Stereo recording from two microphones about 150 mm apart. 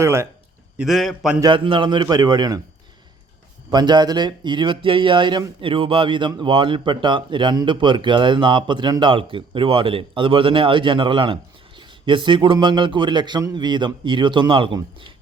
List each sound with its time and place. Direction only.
0.0 s speech: 15° right (ahead or behind)
0.8 s a man's voice: centre (ahead or behind)
1.4 s a man's voice: 30° right (ahead or behind)
3.7 s speech: 30° right (ahead or behind)